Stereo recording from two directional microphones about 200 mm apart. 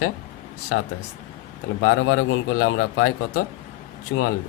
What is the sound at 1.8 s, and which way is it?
Speech, 90° left.